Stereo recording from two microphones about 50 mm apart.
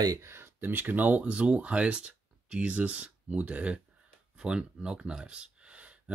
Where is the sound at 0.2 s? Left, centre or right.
Right.